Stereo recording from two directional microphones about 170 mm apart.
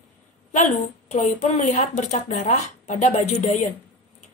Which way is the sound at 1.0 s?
45° left (ahead or behind).